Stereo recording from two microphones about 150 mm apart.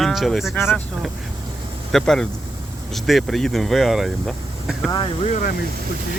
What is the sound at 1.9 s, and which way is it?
Speech, 5° left (ahead or behind).